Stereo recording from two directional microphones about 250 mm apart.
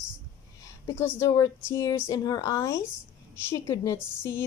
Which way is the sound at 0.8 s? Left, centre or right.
Centre.